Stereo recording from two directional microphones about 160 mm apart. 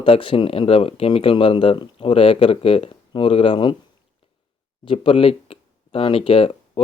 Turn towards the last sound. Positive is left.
turn(degrees=35)  # may be behind; listen again after turning